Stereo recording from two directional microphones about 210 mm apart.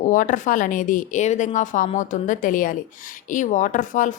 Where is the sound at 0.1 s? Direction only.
40° left (ahead or behind).